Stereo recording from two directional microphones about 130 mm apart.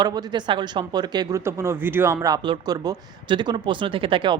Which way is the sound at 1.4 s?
20° right (ahead or behind).